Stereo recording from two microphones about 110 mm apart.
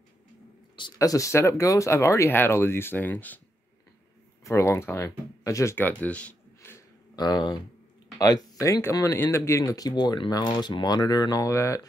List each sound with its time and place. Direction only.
0.9 s speech: 30° left (ahead or behind)
4.5 s speech: 25° left (ahead or behind)
5.8 s speech: 15° left (ahead or behind)
7.2 s speech: 40° left (ahead or behind)